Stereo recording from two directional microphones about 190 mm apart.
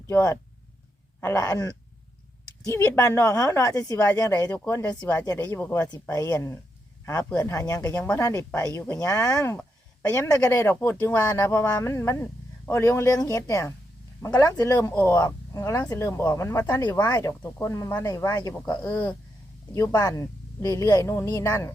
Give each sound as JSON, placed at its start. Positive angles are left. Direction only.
{"t": 0.1, "sound": "speech", "side_deg": 15}
{"t": 2.6, "sound": "speech", "side_deg": 15}
{"t": 18.6, "sound": "speech", "side_deg": 10}